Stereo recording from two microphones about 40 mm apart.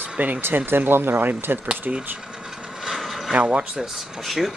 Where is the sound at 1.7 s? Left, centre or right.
Right.